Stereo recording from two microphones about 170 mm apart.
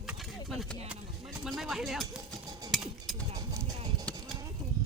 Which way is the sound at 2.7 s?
Centre (ahead or behind).